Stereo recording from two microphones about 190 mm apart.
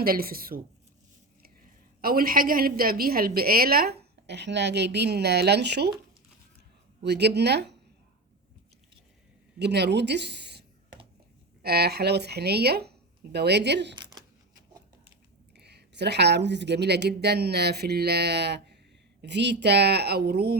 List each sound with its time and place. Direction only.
0.0 s a woman's voice: 50° right (ahead or behind)
2.0 s a woman's voice: 50° right (ahead or behind)
7.0 s speech: 60° right (ahead or behind)
9.6 s speech: 60° right (ahead or behind)
11.6 s speech: 55° right (ahead or behind)
13.9 s a sound: 20° right (ahead or behind)
15.5 s speech: 60° right (ahead or behind)